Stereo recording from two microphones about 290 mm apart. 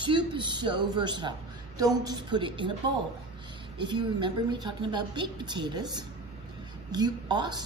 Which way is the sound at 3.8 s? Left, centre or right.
Centre.